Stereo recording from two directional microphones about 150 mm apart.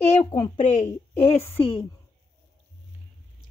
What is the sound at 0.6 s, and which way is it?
Speech, 55° left (ahead or behind).